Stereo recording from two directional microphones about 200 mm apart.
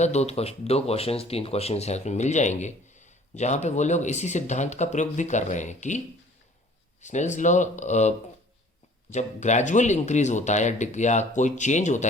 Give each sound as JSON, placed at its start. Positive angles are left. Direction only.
{"t": 0.0, "sound": "speech", "side_deg": 35}
{"t": 7.0, "sound": "speech", "side_deg": 35}
{"t": 9.1, "sound": "speech", "side_deg": 35}